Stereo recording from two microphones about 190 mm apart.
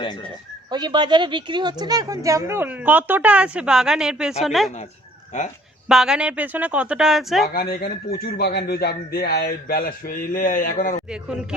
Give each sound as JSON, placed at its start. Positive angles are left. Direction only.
{"t": 0.0, "sound": "speech", "side_deg": 25}
{"t": 0.7, "sound": "speech", "side_deg": -25}
{"t": 5.9, "sound": "speech", "side_deg": -5}
{"t": 7.5, "sound": "speech", "side_deg": 55}